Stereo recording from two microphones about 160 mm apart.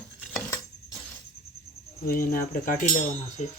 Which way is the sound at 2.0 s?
60° left (ahead or behind).